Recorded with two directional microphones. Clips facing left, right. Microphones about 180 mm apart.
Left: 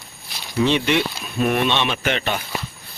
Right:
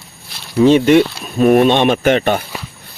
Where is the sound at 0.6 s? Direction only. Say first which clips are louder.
Right 11 dB; 45° right (ahead or behind).